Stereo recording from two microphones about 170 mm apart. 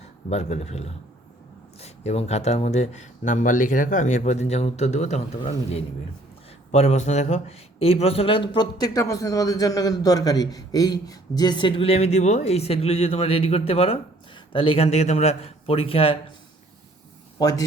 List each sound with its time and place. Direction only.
0.3 s speech: 40° left (ahead or behind)